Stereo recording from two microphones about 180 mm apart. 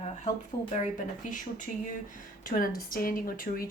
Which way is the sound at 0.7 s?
45° left (ahead or behind).